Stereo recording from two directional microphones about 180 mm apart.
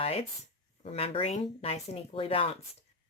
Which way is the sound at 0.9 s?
35° left (ahead or behind).